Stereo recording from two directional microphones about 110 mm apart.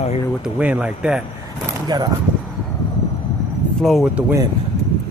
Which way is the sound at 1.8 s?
40° right (ahead or behind).